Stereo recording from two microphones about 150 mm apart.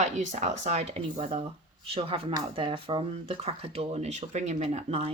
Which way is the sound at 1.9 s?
35° right (ahead or behind).